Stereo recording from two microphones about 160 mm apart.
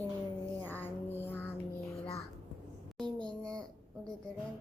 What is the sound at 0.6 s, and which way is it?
Music, 10° left (ahead or behind).